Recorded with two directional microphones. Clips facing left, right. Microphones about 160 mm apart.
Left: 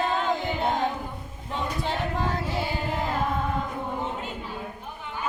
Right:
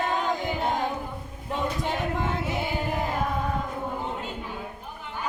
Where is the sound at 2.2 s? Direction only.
20° right (ahead or behind).